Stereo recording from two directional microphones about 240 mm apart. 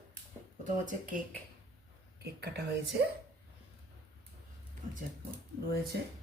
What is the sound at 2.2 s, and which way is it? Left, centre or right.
Speech, right.